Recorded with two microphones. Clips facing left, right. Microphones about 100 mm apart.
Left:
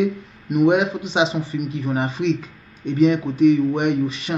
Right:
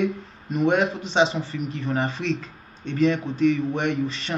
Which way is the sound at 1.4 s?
30° right (ahead or behind).